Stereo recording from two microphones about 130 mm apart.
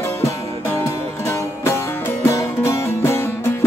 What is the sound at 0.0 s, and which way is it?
Music, 20° left (ahead or behind).